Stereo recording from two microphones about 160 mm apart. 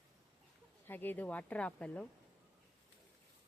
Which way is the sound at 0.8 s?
10° left (ahead or behind).